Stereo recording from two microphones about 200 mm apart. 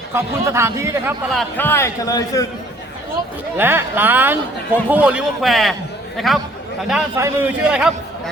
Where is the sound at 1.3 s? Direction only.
10° left (ahead or behind).